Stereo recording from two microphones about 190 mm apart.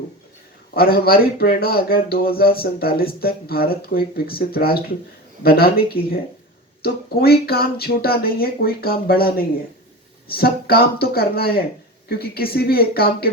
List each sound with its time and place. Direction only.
0.7 s speech: 55° left (ahead or behind)